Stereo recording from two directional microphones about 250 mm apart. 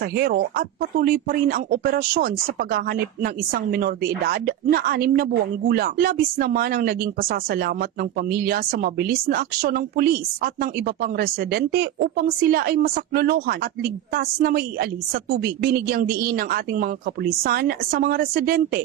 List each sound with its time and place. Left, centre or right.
0.0 s speech: right